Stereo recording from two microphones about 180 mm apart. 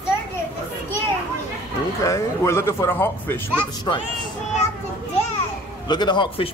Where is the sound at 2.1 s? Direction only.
15° left (ahead or behind).